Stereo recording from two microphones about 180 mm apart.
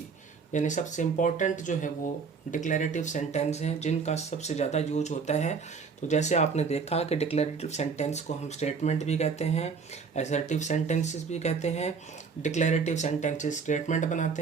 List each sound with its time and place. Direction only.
0.5 s speech: 45° left (ahead or behind)